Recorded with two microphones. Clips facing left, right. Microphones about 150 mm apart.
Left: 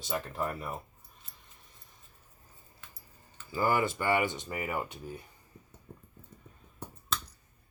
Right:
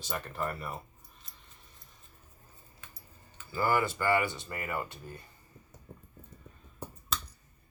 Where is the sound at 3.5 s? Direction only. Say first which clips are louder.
Left 1 dB; 20° left (ahead or behind).